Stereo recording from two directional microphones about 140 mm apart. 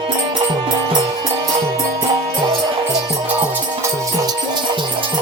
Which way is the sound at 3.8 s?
25° right (ahead or behind).